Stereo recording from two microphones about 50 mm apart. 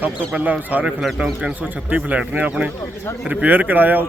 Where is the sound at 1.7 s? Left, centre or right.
Right.